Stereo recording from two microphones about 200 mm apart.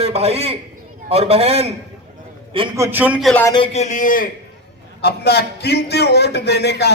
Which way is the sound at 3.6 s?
35° left (ahead or behind).